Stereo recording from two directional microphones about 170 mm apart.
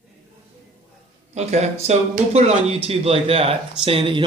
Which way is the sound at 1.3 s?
40° right (ahead or behind).